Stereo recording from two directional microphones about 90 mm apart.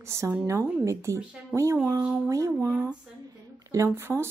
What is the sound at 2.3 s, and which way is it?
Speech, 35° right (ahead or behind).